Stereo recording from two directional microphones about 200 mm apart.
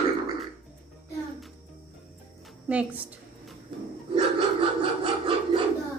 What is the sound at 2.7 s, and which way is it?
Speech, 5° right (ahead or behind).